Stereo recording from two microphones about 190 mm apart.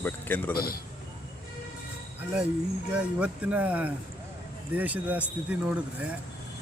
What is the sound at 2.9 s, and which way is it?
Speech, 5° right (ahead or behind).